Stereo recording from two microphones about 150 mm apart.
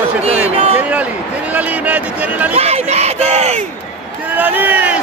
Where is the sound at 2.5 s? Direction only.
45° right (ahead or behind).